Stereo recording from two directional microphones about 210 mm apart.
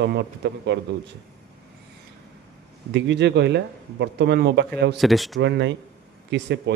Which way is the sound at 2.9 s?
55° right (ahead or behind).